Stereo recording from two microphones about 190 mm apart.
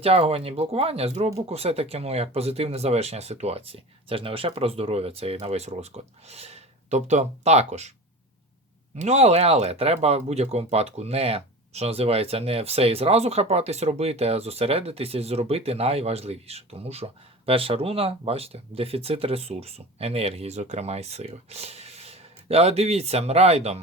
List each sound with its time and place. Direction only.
0.0 s speech: 30° right (ahead or behind)
9.0 s speech: 35° right (ahead or behind)